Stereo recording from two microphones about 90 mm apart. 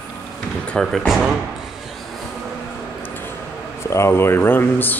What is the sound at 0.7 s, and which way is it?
Speech, 5° left (ahead or behind).